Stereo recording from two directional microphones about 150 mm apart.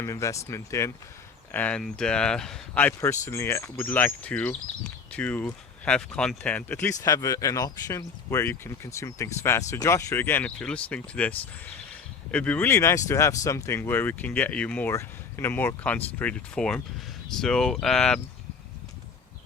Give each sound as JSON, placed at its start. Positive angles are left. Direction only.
{"t": 0.0, "sound": "speech", "side_deg": 20}
{"t": 1.5, "sound": "speech", "side_deg": 10}